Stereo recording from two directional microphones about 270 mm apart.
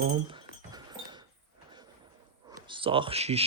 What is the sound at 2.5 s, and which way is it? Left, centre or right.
Speech, centre.